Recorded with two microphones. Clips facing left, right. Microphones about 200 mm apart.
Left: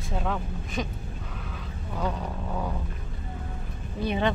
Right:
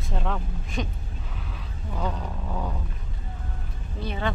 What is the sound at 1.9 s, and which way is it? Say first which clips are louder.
Speech: left 1 dB; centre (ahead or behind).